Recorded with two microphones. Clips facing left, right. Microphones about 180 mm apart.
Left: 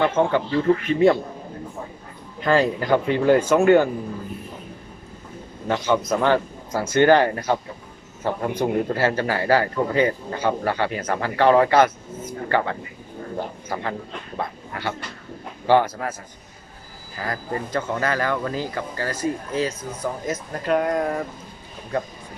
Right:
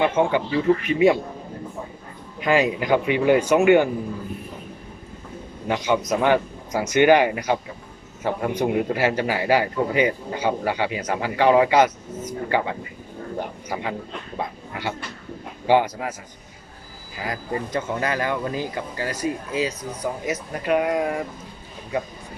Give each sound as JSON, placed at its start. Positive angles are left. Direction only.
{"t": 0.0, "sound": "a man's voice", "side_deg": -15}
{"t": 2.4, "sound": "a man's voice", "side_deg": -15}
{"t": 5.6, "sound": "a man's voice", "side_deg": -15}
{"t": 14.3, "sound": "a man's voice", "side_deg": -15}
{"t": 17.2, "sound": "a man's voice", "side_deg": -15}